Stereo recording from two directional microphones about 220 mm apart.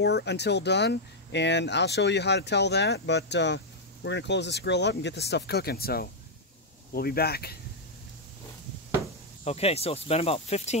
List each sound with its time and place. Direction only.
0.0 s speech: 50° left (ahead or behind)
9.4 s speech: 25° left (ahead or behind)